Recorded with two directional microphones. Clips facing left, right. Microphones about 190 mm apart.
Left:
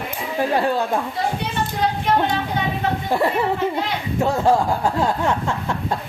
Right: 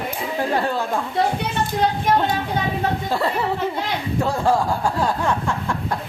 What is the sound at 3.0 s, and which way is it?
Speech, 15° left (ahead or behind).